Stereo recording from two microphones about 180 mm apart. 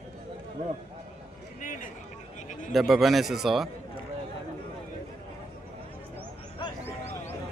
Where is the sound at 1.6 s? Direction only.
45° left (ahead or behind).